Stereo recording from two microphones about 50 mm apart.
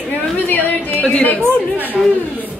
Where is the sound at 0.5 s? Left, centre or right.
Left.